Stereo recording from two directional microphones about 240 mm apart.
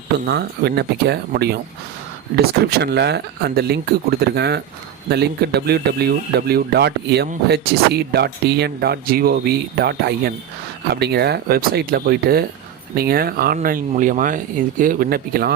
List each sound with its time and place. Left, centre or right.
0.3 s speech: right